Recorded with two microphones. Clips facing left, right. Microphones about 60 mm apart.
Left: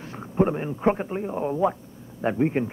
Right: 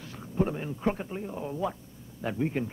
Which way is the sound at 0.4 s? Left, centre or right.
Left.